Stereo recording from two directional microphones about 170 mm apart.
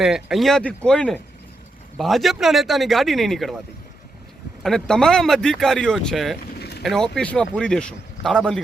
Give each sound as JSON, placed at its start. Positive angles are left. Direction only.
{"t": 0.0, "sound": "speech", "side_deg": 0}
{"t": 4.6, "sound": "speech", "side_deg": 5}
{"t": 6.5, "sound": "vehicle", "side_deg": 70}
{"t": 6.8, "sound": "speech", "side_deg": 0}